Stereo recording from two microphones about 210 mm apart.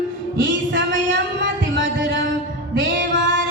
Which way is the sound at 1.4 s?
60° right (ahead or behind).